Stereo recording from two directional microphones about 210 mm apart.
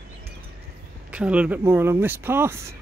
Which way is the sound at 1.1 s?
5° right (ahead or behind).